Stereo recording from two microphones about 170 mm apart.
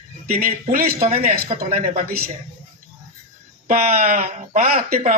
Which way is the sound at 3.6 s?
45° right (ahead or behind).